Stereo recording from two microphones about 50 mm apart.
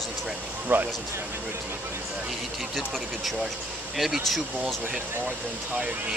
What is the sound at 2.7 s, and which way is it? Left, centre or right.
Speech, centre.